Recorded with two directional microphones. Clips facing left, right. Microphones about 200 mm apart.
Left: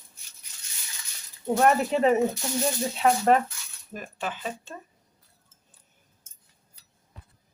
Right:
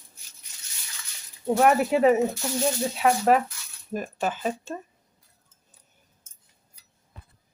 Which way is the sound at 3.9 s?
45° right (ahead or behind).